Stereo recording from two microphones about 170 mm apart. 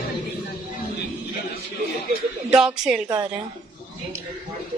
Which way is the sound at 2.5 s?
5° right (ahead or behind).